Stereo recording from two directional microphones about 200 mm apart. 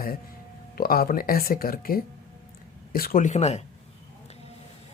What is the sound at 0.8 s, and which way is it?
Speech, 45° left (ahead or behind).